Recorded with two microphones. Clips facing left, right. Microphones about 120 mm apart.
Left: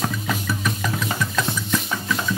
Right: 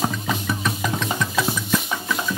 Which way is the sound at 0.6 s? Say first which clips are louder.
Right 1 dB; centre (ahead or behind).